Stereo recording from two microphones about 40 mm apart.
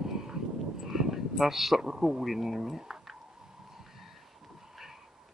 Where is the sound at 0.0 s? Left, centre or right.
Centre.